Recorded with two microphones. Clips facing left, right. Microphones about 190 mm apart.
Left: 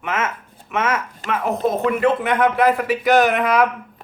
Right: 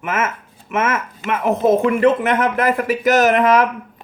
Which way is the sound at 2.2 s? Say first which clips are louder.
Left 1 dB; 45° right (ahead or behind).